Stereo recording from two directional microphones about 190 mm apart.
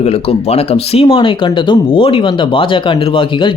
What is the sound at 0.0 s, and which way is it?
Speech, 35° left (ahead or behind).